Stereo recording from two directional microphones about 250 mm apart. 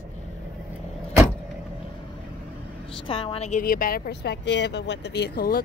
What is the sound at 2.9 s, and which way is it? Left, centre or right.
Speech, left.